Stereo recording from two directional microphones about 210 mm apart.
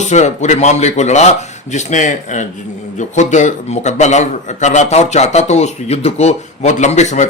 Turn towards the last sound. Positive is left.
turn(degrees=35)  # may be behind; listen again after turning